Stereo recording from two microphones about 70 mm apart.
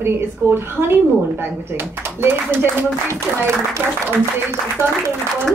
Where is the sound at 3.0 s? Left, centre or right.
Right.